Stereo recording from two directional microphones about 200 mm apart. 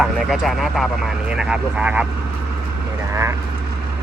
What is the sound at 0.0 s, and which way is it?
Speech, centre (ahead or behind).